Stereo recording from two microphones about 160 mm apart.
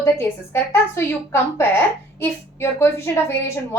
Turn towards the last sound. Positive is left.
turn(degrees=15)  # may be behind; listen again after turning